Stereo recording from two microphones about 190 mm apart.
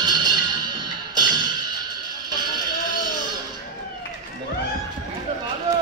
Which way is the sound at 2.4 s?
20° right (ahead or behind).